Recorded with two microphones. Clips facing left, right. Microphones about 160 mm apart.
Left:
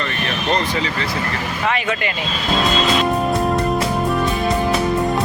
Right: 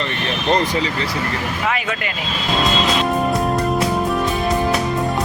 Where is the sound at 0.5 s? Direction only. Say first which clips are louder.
Right 3 dB; 40° right (ahead or behind).